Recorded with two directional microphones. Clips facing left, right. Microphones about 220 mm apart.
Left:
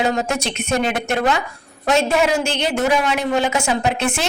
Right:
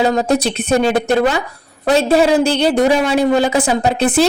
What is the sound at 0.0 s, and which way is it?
A woman's voice, 35° right (ahead or behind).